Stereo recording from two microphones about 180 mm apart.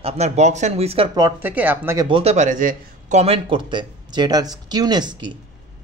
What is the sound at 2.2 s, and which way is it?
Speech, 40° right (ahead or behind).